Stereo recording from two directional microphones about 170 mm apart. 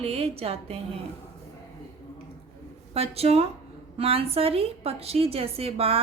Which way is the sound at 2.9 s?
35° right (ahead or behind).